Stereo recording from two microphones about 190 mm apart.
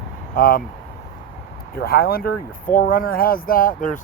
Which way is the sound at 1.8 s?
55° left (ahead or behind).